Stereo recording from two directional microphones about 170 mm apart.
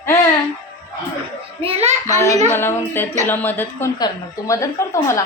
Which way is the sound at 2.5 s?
15° left (ahead or behind).